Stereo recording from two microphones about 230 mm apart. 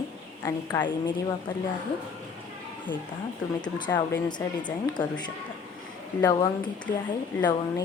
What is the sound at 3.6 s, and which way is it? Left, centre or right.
A woman's voice, centre.